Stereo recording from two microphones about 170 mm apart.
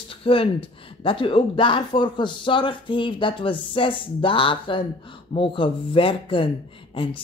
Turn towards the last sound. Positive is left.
turn(degrees=30)  # may be behind; listen again after turning